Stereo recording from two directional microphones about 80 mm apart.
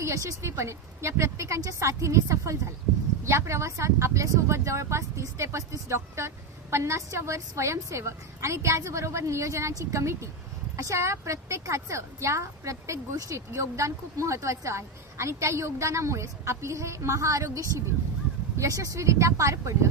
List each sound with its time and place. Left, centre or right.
0.0 s a woman's voice: right